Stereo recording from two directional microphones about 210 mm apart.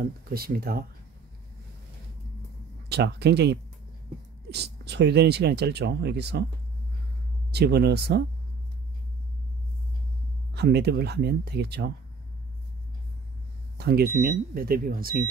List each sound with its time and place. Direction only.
0.0 s speech: 45° right (ahead or behind)
2.9 s speech: 50° right (ahead or behind)
7.5 s speech: 50° right (ahead or behind)
10.5 s speech: 50° right (ahead or behind)
13.7 s speech: 50° right (ahead or behind)